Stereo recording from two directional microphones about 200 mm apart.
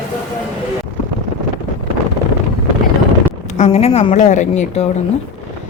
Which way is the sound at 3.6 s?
30° left (ahead or behind).